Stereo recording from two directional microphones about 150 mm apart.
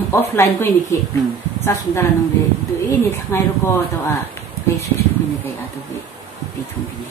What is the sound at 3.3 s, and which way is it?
Speech, 15° left (ahead or behind).